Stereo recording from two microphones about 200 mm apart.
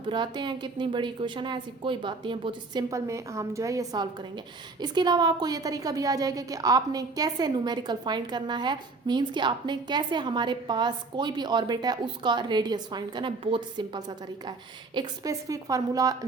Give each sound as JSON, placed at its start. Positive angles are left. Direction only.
{"t": 0.1, "sound": "a woman's voice", "side_deg": -25}